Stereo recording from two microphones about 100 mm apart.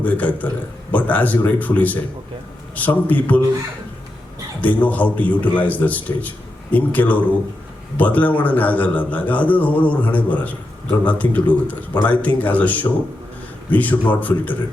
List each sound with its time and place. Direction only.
0.0 s a man's voice: 15° left (ahead or behind)
4.6 s a man's voice: 15° left (ahead or behind)